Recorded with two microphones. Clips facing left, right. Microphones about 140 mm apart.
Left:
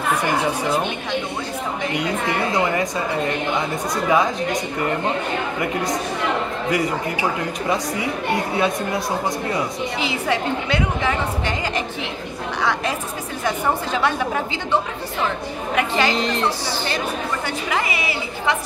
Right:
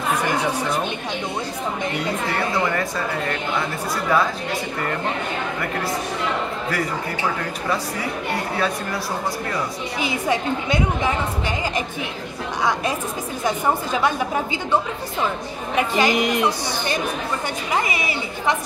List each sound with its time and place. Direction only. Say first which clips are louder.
2.5 s speech: left 2 dB; 20° left (ahead or behind)
8.5 s speech: left 3 dB; 20° left (ahead or behind)
10.0 s a woman's voice: right 1 dB; 15° right (ahead or behind)
15.9 s a woman's voice: right 4 dB; 15° right (ahead or behind)